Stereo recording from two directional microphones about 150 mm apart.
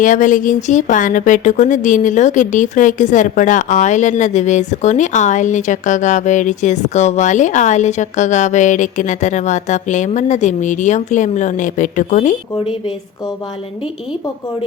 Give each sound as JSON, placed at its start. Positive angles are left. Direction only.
{"t": 0.0, "sound": "speech", "side_deg": 60}